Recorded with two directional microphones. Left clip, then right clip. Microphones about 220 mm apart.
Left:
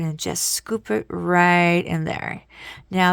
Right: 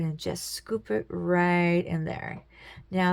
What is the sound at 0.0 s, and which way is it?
A woman's voice, 35° left (ahead or behind).